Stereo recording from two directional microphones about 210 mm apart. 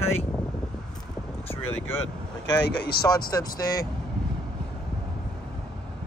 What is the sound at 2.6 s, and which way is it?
Speech, 50° left (ahead or behind).